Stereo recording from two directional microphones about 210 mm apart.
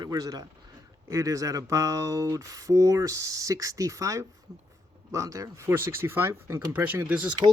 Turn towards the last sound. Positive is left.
turn(degrees=-5)  # may be behind; listen again after turning